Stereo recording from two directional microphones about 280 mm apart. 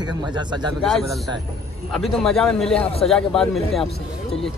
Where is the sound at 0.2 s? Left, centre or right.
Centre.